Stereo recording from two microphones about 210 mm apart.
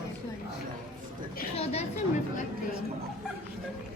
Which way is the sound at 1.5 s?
30° left (ahead or behind).